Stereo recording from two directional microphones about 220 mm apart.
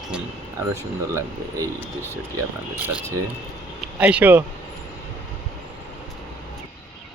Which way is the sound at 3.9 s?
5° right (ahead or behind).